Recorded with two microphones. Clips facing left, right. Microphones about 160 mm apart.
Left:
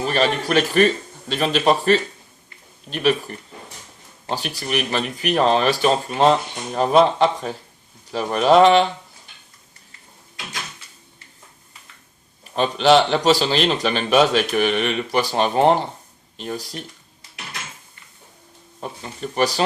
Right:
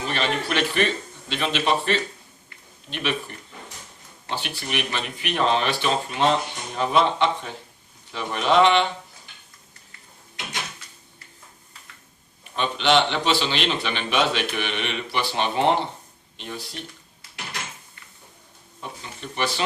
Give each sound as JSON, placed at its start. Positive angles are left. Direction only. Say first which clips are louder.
{"t": 0.0, "sound": "speech", "louder": "left 6 dB", "side_deg": 40}
{"t": 12.5, "sound": "speech", "louder": "left 5 dB", "side_deg": 40}
{"t": 18.8, "sound": "speech", "louder": "left 6 dB", "side_deg": 40}